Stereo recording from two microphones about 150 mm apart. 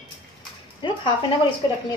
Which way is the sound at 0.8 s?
30° left (ahead or behind).